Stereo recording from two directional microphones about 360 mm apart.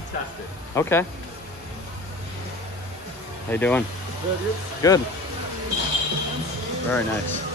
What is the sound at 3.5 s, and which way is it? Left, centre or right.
Speech, centre.